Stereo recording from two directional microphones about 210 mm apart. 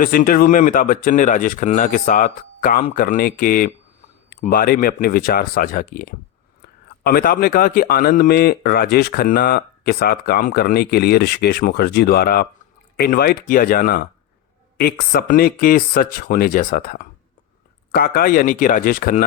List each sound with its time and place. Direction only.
0.0 s speech: 40° left (ahead or behind)